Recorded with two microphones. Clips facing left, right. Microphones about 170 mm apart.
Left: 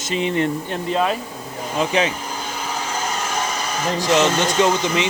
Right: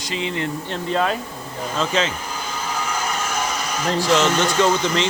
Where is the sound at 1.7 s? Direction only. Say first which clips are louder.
Left 2 dB; 15° left (ahead or behind).